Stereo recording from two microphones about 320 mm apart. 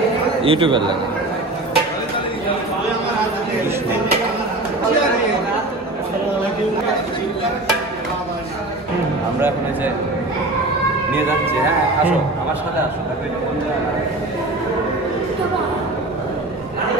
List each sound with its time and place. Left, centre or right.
0.4 s a man's voice: centre